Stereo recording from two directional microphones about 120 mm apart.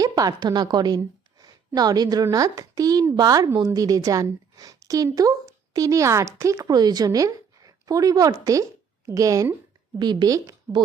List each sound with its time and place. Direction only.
0.0 s a woman's voice: 30° right (ahead or behind)
10.0 s a woman's voice: 35° right (ahead or behind)